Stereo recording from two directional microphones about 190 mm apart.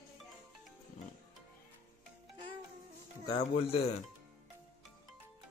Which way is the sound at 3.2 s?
30° left (ahead or behind).